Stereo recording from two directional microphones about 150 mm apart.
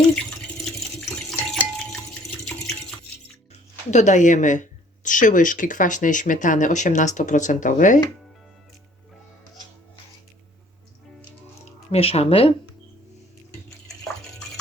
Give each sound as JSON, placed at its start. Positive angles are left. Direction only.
{"t": 0.6, "sound": "water", "side_deg": 0}
{"t": 2.4, "sound": "a sound", "side_deg": 0}
{"t": 3.9, "sound": "speech", "side_deg": 55}
{"t": 11.6, "sound": "speech", "side_deg": 40}
{"t": 13.7, "sound": "bathtub", "side_deg": 5}